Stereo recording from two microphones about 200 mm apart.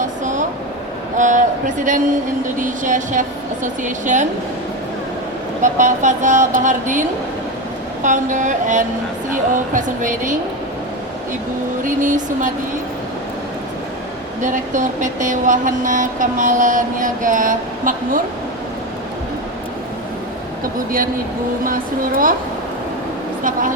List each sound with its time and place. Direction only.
0.0 s a sound: 40° right (ahead or behind)
1.1 s speech: 40° right (ahead or behind)
2.6 s vehicle: 40° right (ahead or behind)
5.6 s vehicle: 40° right (ahead or behind)
8.0 s vehicle: 40° right (ahead or behind)
11.8 s vehicle: 40° right (ahead or behind)
14.4 s vehicle: 40° right (ahead or behind)
20.7 s speech: 45° right (ahead or behind)
23.4 s air conditioning: 40° right (ahead or behind)